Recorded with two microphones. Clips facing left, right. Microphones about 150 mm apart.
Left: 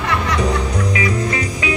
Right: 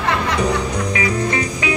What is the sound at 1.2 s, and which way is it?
Music, 35° right (ahead or behind).